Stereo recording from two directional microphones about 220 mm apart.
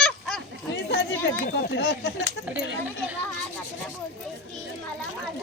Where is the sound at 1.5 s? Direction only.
50° left (ahead or behind).